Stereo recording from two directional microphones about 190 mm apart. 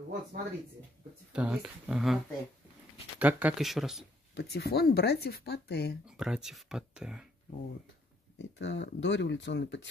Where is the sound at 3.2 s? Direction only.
5° right (ahead or behind).